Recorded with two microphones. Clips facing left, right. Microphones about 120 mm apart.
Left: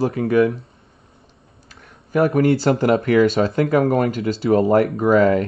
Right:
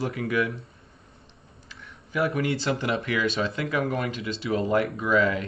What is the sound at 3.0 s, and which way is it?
Speech, 45° left (ahead or behind).